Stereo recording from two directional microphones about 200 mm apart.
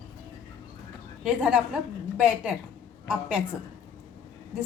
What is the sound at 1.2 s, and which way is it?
A woman's voice, 5° right (ahead or behind).